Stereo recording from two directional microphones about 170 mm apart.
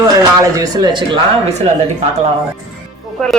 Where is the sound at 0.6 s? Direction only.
25° right (ahead or behind).